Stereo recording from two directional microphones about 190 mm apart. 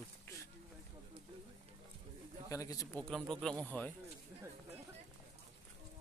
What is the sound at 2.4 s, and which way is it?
Speech, 15° left (ahead or behind).